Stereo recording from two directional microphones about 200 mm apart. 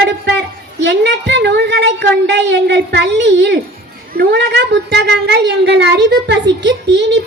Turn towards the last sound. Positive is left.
turn(degrees=-60)  # may be behind; listen again after turning